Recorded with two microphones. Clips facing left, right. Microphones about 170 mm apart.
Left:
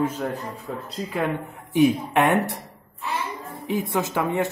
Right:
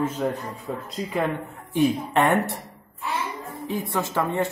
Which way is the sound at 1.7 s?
15° left (ahead or behind).